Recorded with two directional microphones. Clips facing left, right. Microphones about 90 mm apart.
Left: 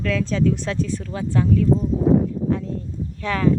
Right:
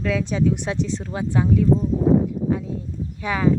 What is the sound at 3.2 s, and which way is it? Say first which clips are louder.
Speech: even; 15° right (ahead or behind).